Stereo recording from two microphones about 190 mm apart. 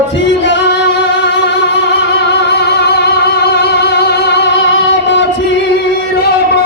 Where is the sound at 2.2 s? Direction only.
60° left (ahead or behind).